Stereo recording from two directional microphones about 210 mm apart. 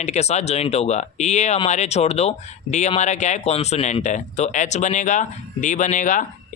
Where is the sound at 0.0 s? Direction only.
30° left (ahead or behind).